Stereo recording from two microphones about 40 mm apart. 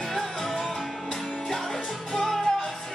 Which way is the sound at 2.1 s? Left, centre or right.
Centre.